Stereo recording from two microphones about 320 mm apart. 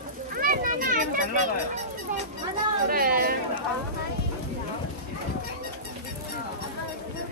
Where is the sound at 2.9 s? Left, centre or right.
Right.